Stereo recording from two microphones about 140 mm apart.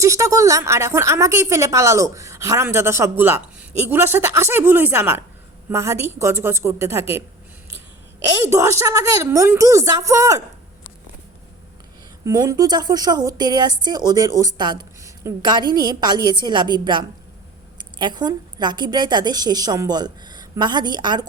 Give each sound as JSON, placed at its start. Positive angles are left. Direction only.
{"t": 0.0, "sound": "a woman's voice", "side_deg": -20}
{"t": 8.4, "sound": "speech", "side_deg": -20}
{"t": 12.2, "sound": "a woman's voice", "side_deg": -25}